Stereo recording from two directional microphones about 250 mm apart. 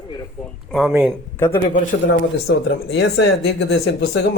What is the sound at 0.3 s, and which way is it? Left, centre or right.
Speech, centre.